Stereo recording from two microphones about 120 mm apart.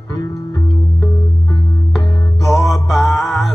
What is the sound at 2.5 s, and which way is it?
Music, centre (ahead or behind).